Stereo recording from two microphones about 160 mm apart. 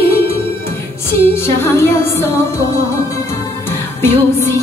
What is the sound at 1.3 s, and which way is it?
Music, 15° left (ahead or behind).